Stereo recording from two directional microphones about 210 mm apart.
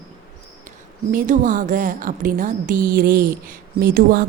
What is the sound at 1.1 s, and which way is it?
A woman's voice, 35° right (ahead or behind).